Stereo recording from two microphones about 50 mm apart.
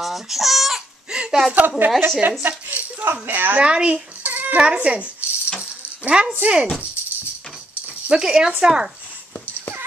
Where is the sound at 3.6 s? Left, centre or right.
Centre.